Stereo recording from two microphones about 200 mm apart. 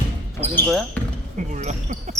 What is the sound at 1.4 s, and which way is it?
Speech, 35° right (ahead or behind).